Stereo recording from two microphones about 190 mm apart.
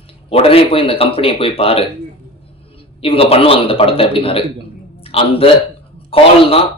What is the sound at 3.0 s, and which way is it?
A man's voice, 30° left (ahead or behind).